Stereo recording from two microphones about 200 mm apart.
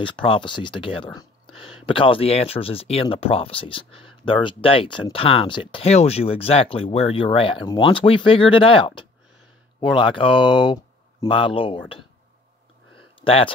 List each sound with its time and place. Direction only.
0.0 s speech: 25° left (ahead or behind)
13.2 s speech: 30° left (ahead or behind)